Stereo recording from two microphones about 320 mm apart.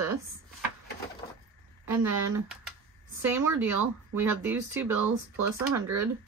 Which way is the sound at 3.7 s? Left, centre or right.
Right.